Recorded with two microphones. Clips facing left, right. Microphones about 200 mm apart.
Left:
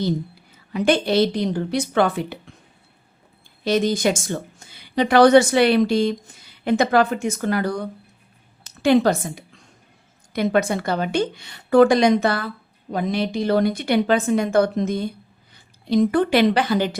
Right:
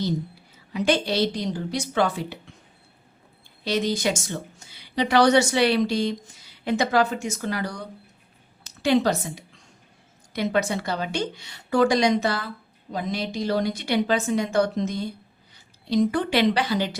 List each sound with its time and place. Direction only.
0.7 s a woman's voice: 55° left (ahead or behind)
3.6 s a woman's voice: 50° left (ahead or behind)